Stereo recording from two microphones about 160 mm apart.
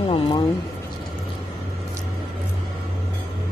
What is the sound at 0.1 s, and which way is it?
Speech, 30° left (ahead or behind).